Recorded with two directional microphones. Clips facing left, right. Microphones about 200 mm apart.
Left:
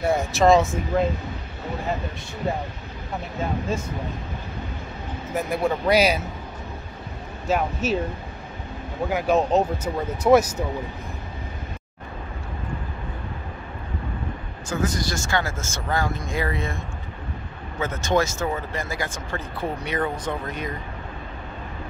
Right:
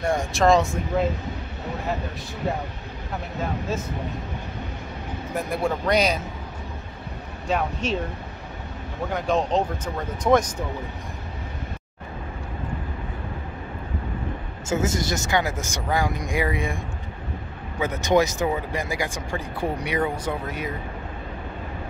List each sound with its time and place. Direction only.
0.0 s speech: 5° left (ahead or behind)
5.3 s speech: centre (ahead or behind)
7.4 s speech: 5° left (ahead or behind)
9.1 s speech: 5° left (ahead or behind)
14.7 s speech: 25° right (ahead or behind); by 20.7 s 10° right (ahead or behind)